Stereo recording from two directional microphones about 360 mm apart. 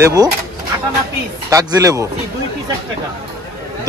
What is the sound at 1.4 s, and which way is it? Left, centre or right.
Speech, centre.